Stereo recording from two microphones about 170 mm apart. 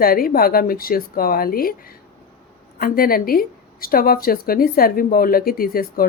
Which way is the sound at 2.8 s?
60° left (ahead or behind).